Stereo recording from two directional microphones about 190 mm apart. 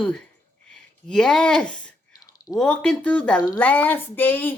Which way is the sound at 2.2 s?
20° left (ahead or behind).